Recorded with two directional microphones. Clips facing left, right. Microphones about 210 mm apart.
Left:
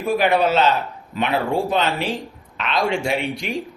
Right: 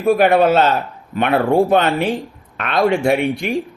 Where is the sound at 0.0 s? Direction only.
50° right (ahead or behind).